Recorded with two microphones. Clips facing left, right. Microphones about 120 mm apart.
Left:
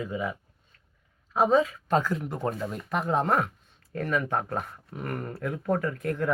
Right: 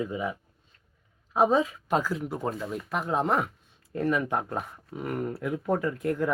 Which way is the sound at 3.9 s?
15° right (ahead or behind).